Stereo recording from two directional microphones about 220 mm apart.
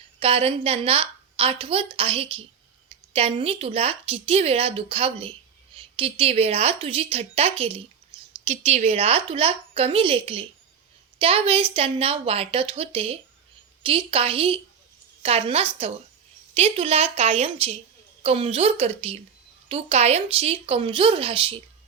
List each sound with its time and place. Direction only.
0.2 s speech: 25° right (ahead or behind)